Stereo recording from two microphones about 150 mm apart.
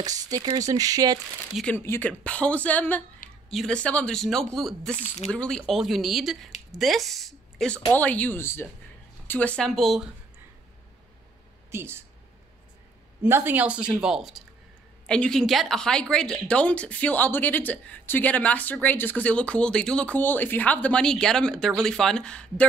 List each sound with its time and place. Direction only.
0.0 s speech: 25° right (ahead or behind)
1.5 s a woman's voice: 5° left (ahead or behind)
3.2 s a sound: 65° left (ahead or behind)
3.5 s speech: 5° left (ahead or behind)
5.0 s speech: 50° left (ahead or behind)
5.3 s a woman's voice: 5° left (ahead or behind)
11.7 s speech: 15° right (ahead or behind)
13.2 s a woman's voice: 15° right (ahead or behind); by 22.7 s 5° left (ahead or behind)